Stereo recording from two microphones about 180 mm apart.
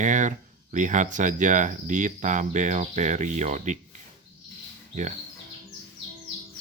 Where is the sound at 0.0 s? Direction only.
45° right (ahead or behind).